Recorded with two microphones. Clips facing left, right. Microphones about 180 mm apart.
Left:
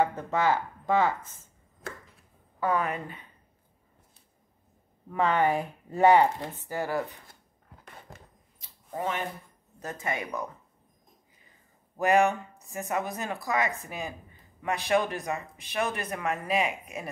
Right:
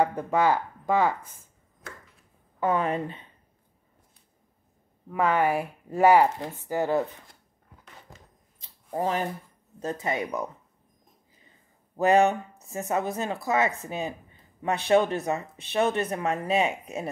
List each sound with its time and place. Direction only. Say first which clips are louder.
0.0 s speech: right 3 dB; 15° right (ahead or behind)
2.6 s speech: right 3 dB; 25° right (ahead or behind)
5.1 s speech: right 1 dB; 10° right (ahead or behind)
6.7 s speech: right 5 dB; 20° right (ahead or behind)
8.9 s speech: right 5 dB; 35° right (ahead or behind)
9.8 s speech: right 5 dB; 20° right (ahead or behind)
12.0 s a woman's voice: right 3 dB; 25° right (ahead or behind)